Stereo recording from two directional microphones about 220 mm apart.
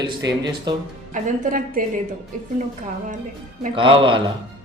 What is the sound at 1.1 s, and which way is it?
Speech, 40° right (ahead or behind).